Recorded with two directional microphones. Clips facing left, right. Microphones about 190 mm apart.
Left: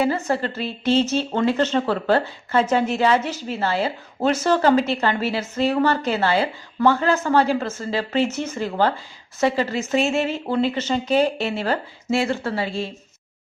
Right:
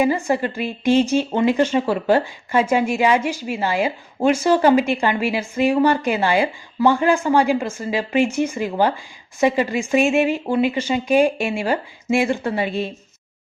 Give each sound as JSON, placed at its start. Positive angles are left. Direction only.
{"t": 0.0, "sound": "speech", "side_deg": -15}